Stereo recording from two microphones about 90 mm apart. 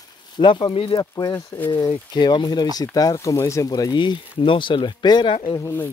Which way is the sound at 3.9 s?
70° left (ahead or behind).